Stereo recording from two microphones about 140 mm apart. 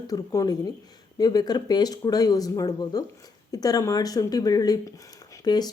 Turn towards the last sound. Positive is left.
turn(degrees=30)  # may be behind; listen again after turning